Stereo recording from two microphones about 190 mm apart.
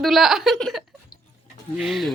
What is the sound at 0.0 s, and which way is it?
Speech, centre (ahead or behind).